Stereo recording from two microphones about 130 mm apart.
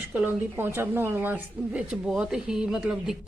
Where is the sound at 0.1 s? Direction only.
15° right (ahead or behind).